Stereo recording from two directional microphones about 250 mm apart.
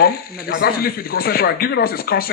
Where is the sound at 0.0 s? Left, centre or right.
Left.